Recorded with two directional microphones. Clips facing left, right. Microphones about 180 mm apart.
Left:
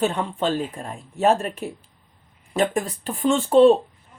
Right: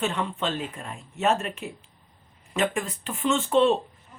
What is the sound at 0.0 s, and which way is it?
Speech, 35° left (ahead or behind).